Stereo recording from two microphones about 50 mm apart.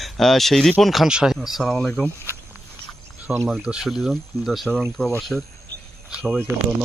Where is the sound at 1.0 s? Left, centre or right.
Centre.